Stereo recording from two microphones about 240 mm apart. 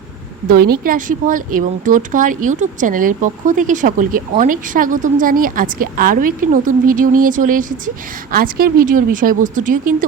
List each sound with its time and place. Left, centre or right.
0.4 s speech: right